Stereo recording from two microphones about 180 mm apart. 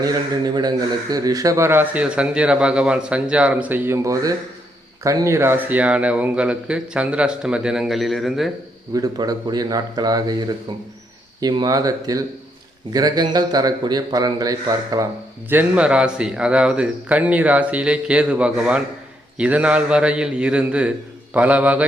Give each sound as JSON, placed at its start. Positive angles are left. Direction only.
{"t": 0.0, "sound": "a man's voice", "side_deg": -20}
{"t": 8.9, "sound": "a man's voice", "side_deg": -20}
{"t": 15.4, "sound": "speech", "side_deg": -10}